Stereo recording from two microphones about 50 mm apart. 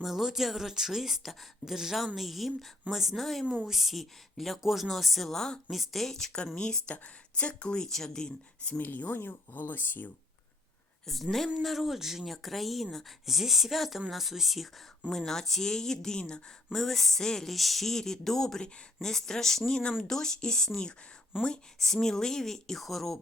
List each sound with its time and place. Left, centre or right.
0.0 s speech: centre
6.6 s speech: centre
8.8 s speech: left
11.0 s a woman's voice: centre
15.1 s speech: centre
16.7 s speech: centre